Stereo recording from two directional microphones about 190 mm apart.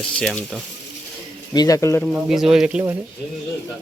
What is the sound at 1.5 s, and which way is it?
Speech, 20° left (ahead or behind).